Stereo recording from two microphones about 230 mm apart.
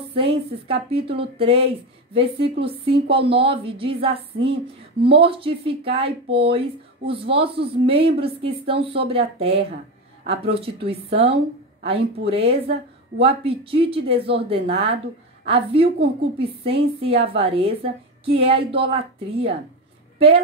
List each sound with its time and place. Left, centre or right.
0.1 s speech: right